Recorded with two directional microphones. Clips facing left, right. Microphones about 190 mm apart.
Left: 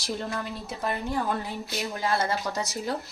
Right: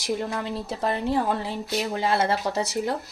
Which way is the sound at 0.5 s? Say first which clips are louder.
Right 4 dB; 30° right (ahead or behind).